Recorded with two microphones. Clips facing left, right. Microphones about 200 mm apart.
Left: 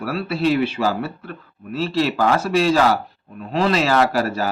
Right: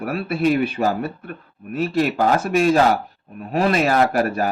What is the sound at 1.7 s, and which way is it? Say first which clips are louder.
A man's voice: right 1 dB; 50° right (ahead or behind).